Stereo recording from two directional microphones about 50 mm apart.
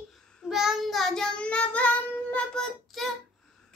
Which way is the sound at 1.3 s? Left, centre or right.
Left.